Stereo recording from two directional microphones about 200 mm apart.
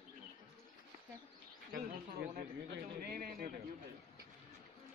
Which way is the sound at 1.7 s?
50° right (ahead or behind).